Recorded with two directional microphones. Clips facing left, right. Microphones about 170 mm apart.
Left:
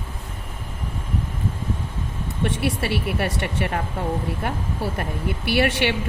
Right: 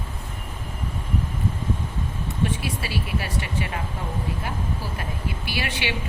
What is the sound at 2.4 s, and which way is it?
A woman's voice, 65° left (ahead or behind).